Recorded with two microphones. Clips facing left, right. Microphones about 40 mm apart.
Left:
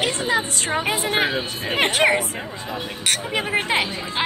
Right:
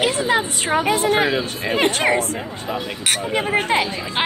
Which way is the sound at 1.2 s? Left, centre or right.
Right.